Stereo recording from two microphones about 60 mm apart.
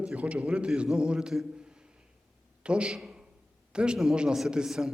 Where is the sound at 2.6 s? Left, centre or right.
Centre.